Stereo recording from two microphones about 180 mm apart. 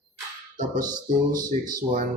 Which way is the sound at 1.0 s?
50° right (ahead or behind).